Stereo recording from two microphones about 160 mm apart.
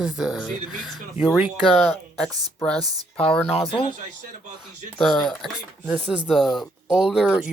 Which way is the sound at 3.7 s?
35° left (ahead or behind).